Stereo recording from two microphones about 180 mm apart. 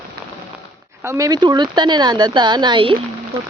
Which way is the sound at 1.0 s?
15° right (ahead or behind).